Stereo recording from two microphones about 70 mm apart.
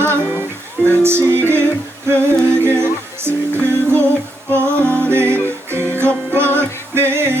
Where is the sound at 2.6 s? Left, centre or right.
Right.